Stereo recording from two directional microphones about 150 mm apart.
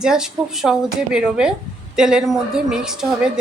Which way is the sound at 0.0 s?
5° right (ahead or behind).